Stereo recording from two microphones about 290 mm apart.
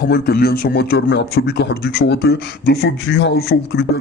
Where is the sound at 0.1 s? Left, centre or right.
Left.